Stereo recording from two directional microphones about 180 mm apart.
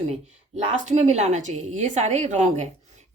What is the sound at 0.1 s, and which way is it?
A woman's voice, 40° right (ahead or behind).